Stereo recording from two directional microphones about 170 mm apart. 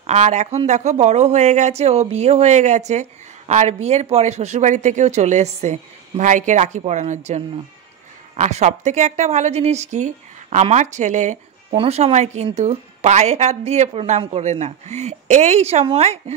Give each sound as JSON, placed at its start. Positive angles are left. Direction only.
{"t": 0.0, "sound": "a woman's voice", "side_deg": -40}